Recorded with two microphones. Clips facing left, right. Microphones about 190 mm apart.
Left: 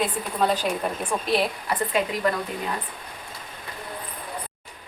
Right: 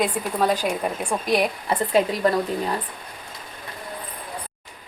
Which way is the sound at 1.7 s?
35° right (ahead or behind).